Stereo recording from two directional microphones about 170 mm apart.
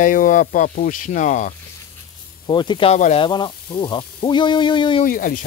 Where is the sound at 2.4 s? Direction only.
25° left (ahead or behind).